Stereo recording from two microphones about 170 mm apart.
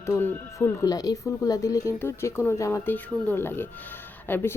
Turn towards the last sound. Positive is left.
turn(degrees=10)  # may be behind; listen again after turning